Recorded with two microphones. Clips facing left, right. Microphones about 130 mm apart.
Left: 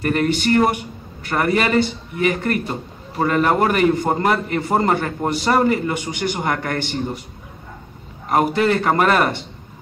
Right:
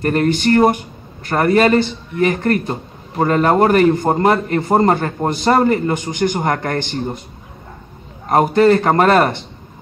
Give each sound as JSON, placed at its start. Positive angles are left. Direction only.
{"t": 0.0, "sound": "speech", "side_deg": -40}
{"t": 8.3, "sound": "speech", "side_deg": -35}